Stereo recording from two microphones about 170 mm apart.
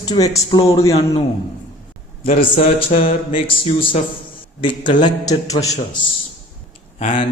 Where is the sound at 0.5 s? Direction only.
35° left (ahead or behind).